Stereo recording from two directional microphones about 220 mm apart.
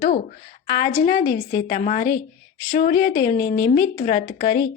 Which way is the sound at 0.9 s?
35° left (ahead or behind).